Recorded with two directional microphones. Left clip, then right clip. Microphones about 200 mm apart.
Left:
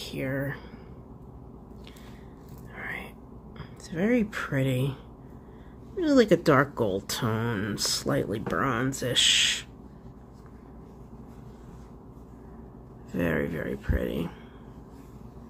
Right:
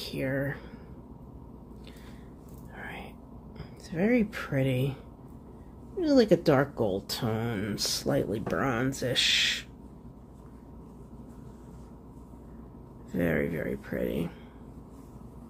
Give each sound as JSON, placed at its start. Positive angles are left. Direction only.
{"t": 0.0, "sound": "speech", "side_deg": 0}
{"t": 2.7, "sound": "a sound", "side_deg": 5}
{"t": 3.5, "sound": "speech", "side_deg": 0}
{"t": 5.9, "sound": "speech", "side_deg": 5}
{"t": 13.1, "sound": "speech", "side_deg": 0}